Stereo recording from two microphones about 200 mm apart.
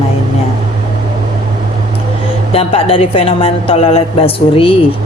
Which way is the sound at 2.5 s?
30° left (ahead or behind).